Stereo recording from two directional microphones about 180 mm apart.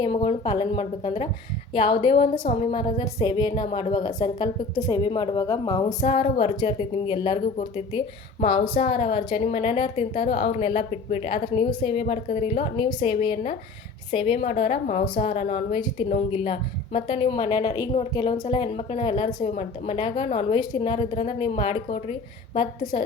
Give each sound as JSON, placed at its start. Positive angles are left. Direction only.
{"t": 0.0, "sound": "a woman's voice", "side_deg": 30}
{"t": 6.0, "sound": "a woman's voice", "side_deg": 35}
{"t": 8.4, "sound": "a woman's voice", "side_deg": 25}
{"t": 15.0, "sound": "a woman's voice", "side_deg": 25}
{"t": 15.3, "sound": "a woman's voice", "side_deg": 40}